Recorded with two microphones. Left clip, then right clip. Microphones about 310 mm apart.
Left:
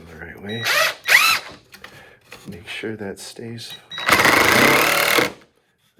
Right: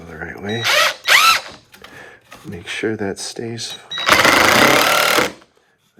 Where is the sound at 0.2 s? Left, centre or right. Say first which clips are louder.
Right 5 dB; centre.